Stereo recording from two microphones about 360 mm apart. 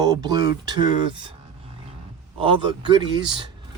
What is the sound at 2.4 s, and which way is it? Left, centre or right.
Speech, centre.